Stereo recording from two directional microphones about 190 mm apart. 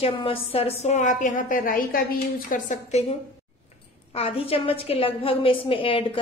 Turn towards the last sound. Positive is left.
turn(degrees=30)  # may be behind; listen again after turning